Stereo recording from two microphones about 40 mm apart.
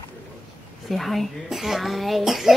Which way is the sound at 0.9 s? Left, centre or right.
Centre.